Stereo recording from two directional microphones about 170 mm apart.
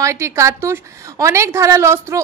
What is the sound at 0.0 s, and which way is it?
A woman's voice, 15° right (ahead or behind).